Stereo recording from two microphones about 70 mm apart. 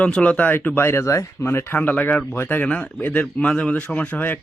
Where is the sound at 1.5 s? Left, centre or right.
Left.